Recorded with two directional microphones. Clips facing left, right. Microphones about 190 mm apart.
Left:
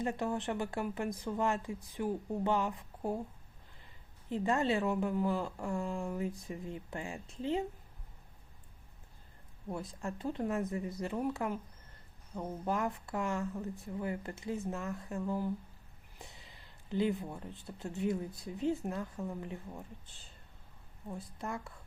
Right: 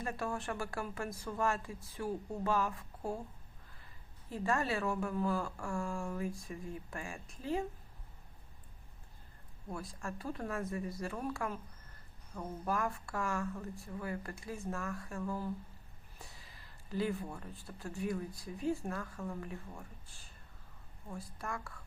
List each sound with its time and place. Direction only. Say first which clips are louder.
0.0 s speech: left 4 dB; 20° left (ahead or behind)
4.3 s speech: left 3 dB; 20° left (ahead or behind)
9.6 s speech: left 3 dB; 20° left (ahead or behind)
21.3 s speech: left 2 dB; 20° left (ahead or behind)